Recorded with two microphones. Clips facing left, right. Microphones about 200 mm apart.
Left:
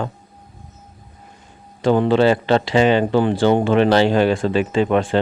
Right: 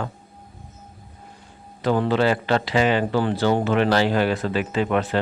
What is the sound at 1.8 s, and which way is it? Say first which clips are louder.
Speech: left 5 dB; 25° left (ahead or behind).